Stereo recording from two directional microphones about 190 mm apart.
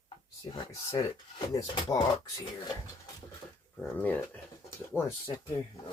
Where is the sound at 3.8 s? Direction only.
5° left (ahead or behind).